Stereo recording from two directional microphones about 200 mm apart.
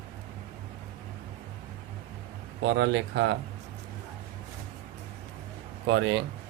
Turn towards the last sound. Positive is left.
turn(degrees=-65)  # may be behind; listen again after turning